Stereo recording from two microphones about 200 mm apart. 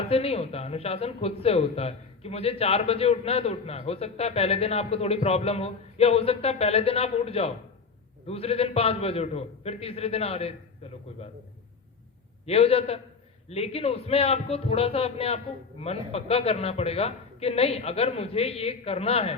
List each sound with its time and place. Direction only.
0.0 s a man's voice: 30° left (ahead or behind)
12.5 s a man's voice: 30° left (ahead or behind)